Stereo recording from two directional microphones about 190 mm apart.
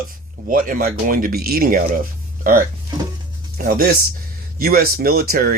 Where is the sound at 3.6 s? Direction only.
50° right (ahead or behind).